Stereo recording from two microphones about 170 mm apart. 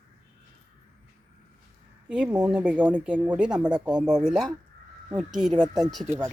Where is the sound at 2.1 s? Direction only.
5° right (ahead or behind).